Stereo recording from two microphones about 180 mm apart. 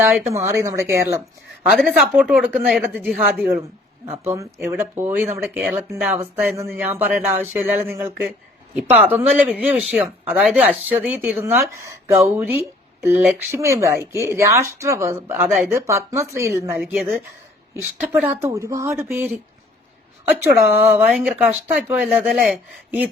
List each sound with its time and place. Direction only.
0.0 s speech: 15° right (ahead or behind)
16.8 s speech: centre (ahead or behind)
20.6 s speech: 10° right (ahead or behind)